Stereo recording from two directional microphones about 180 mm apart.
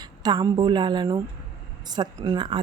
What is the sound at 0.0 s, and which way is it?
A woman's voice, 25° right (ahead or behind).